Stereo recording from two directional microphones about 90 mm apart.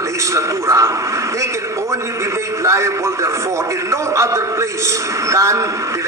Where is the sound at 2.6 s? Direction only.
35° right (ahead or behind).